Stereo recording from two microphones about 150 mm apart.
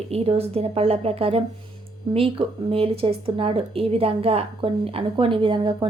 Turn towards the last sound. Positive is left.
turn(degrees=-30)  # may be behind; listen again after turning